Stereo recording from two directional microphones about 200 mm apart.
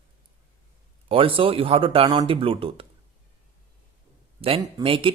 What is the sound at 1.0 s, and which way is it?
Speech, 25° right (ahead or behind).